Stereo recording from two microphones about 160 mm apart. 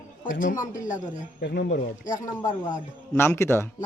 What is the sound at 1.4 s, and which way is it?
Speech, 90° left.